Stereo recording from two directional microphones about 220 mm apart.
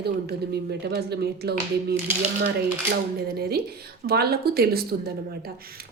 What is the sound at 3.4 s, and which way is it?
Speech, 45° right (ahead or behind).